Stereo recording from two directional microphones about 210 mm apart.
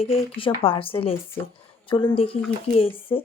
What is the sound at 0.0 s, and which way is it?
A woman's voice, 25° left (ahead or behind).